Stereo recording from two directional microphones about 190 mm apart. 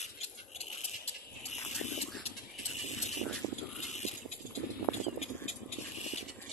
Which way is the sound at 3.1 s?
Centre (ahead or behind).